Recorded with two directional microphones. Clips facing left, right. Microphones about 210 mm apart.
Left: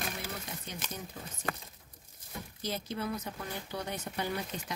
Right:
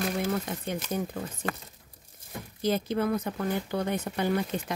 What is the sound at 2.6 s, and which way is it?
Speech, 55° right (ahead or behind).